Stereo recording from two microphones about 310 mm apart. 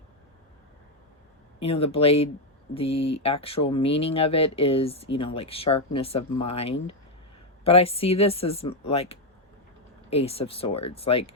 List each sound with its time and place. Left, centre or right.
1.5 s speech: centre